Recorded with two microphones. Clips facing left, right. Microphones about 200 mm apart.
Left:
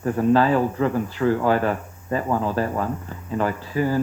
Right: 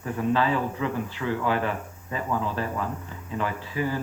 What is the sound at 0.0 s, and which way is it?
Speech, 45° left (ahead or behind).